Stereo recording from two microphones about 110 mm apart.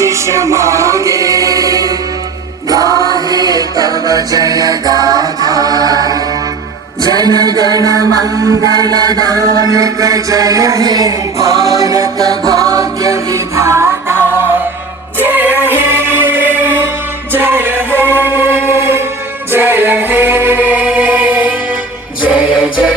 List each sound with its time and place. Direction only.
0.0 s music: 25° right (ahead or behind); by 22.7 s 10° right (ahead or behind)